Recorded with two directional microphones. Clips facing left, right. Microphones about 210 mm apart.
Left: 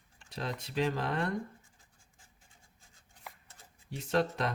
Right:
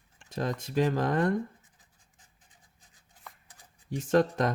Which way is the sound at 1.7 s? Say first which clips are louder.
Even; 20° right (ahead or behind).